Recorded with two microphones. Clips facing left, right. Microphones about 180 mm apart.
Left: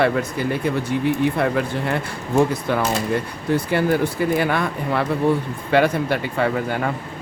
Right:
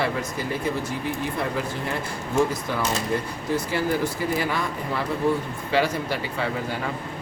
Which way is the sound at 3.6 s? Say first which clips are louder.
Left 5 dB; 60° left (ahead or behind).